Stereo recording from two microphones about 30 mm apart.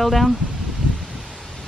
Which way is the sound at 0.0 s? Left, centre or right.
Centre.